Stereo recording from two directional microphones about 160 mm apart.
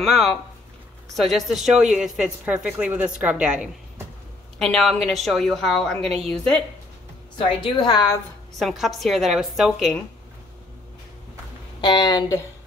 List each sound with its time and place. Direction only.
0.0 s speech: centre (ahead or behind)
7.3 s a woman's voice: 30° left (ahead or behind)
8.5 s speech: centre (ahead or behind)
11.8 s a woman's voice: 25° left (ahead or behind)